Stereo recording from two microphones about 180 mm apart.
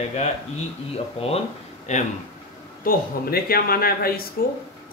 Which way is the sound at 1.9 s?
40° left (ahead or behind).